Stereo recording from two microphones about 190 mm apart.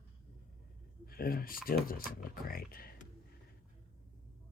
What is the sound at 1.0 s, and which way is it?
Speech, 50° left (ahead or behind).